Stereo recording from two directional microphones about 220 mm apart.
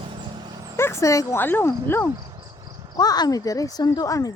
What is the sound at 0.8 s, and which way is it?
Speech, 10° left (ahead or behind).